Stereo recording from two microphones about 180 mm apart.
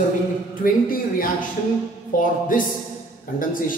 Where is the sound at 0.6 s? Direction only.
50° left (ahead or behind).